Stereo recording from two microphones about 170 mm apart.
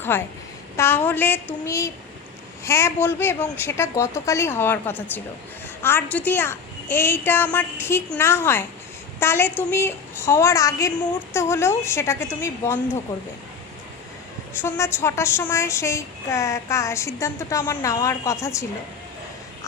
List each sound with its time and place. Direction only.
0.1 s a woman's voice: 10° left (ahead or behind)
14.6 s a woman's voice: 15° left (ahead or behind)